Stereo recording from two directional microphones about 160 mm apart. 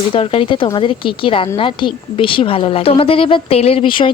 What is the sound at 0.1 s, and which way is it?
Speech, 35° left (ahead or behind).